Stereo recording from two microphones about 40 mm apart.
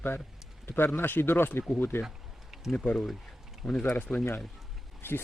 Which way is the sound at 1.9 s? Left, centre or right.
Left.